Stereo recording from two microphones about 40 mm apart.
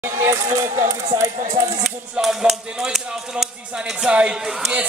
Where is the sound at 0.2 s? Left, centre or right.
Right.